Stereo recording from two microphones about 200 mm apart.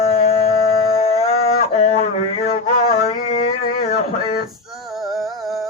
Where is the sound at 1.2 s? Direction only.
30° left (ahead or behind).